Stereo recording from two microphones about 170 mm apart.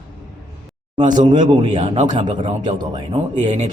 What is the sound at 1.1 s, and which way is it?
Speech, 45° right (ahead or behind).